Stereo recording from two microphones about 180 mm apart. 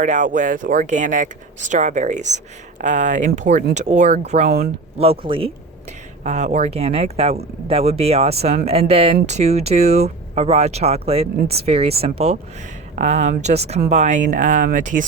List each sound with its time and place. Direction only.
0.0 s speech: 45° right (ahead or behind)
6.2 s speech: 40° right (ahead or behind)